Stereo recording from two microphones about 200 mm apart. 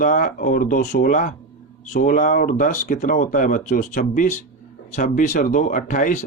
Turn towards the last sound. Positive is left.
turn(degrees=40)  # may be behind; listen again after turning